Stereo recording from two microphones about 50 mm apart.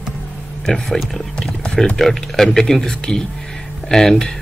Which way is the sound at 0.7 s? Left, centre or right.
Centre.